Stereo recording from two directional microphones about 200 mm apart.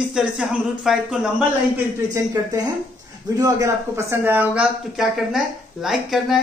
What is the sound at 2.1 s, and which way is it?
Speech, 15° right (ahead or behind).